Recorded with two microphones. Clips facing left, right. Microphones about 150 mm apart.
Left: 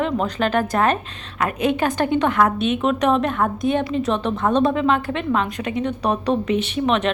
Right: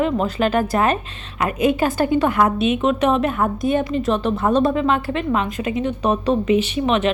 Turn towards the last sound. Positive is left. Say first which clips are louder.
# right 1 dB
turn(degrees=-5)  # may be behind; listen again after turning